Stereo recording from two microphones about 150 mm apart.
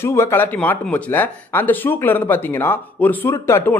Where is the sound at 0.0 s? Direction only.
15° left (ahead or behind).